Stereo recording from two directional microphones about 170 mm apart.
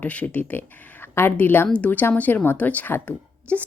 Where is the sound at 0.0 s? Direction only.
10° left (ahead or behind).